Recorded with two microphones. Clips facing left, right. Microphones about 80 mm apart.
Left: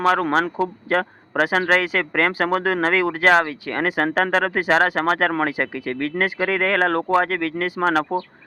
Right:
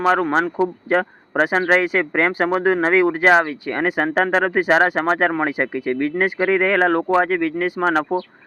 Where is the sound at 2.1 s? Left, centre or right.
Right.